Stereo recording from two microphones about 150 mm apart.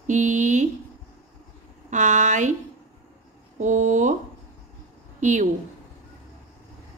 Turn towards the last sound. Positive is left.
turn(degrees=-55)  # may be behind; listen again after turning